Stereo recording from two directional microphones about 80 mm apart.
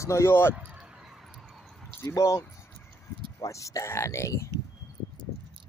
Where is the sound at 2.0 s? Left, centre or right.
Left.